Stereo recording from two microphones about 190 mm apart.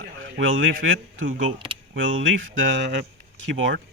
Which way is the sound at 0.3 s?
85° right.